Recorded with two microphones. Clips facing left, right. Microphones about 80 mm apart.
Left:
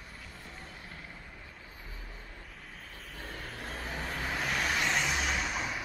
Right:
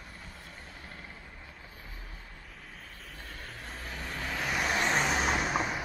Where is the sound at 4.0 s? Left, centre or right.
Centre.